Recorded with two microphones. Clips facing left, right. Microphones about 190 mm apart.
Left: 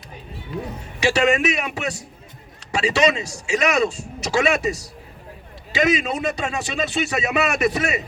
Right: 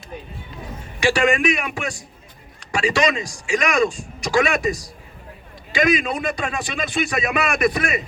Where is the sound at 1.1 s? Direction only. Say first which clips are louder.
Even; 25° left (ahead or behind).